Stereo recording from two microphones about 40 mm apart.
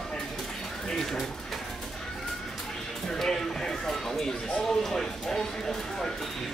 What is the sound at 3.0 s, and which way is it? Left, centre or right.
Speech, centre.